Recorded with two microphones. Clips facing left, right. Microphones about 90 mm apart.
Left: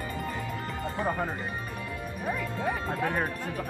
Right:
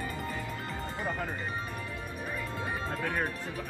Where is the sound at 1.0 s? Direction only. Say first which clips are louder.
Left 6 dB; 40° left (ahead or behind).